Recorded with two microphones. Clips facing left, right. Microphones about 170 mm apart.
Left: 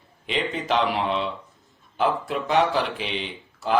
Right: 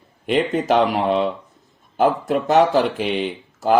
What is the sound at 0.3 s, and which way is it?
Speech, 50° right (ahead or behind).